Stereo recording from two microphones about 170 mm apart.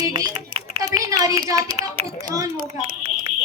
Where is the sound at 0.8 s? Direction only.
20° right (ahead or behind).